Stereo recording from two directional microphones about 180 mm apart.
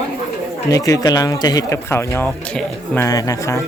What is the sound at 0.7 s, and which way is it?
Speech, 20° left (ahead or behind).